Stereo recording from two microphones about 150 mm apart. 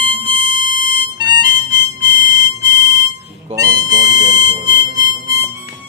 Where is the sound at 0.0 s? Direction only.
35° right (ahead or behind).